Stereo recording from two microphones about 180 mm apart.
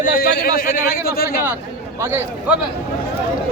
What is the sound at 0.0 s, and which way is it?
A man's voice, 50° left (ahead or behind).